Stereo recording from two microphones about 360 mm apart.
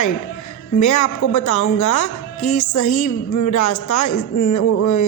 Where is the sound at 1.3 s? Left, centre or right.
Left.